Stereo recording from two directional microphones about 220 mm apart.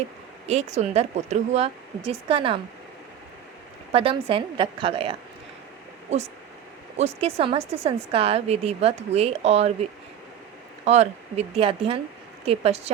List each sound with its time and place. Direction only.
0.4 s a woman's voice: 30° right (ahead or behind)
3.9 s a woman's voice: 25° right (ahead or behind)
6.9 s a woman's voice: 30° right (ahead or behind)
10.8 s a woman's voice: 30° right (ahead or behind)